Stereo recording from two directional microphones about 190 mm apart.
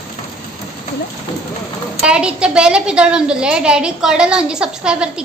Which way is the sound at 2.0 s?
5° right (ahead or behind).